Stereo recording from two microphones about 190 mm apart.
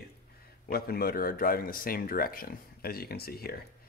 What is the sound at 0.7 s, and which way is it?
Speech, 55° left (ahead or behind).